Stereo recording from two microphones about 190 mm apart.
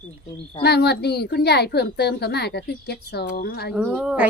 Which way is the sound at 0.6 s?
60° left (ahead or behind).